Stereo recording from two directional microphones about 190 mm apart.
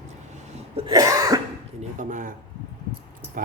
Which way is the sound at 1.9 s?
40° right (ahead or behind).